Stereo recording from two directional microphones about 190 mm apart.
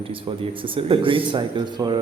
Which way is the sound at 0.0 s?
30° right (ahead or behind).